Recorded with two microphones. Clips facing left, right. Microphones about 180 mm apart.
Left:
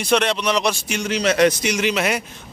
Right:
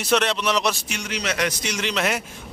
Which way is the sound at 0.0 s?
Centre (ahead or behind).